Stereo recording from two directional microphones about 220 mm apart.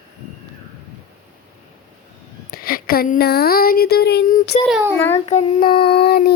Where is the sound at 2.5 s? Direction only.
40° left (ahead or behind).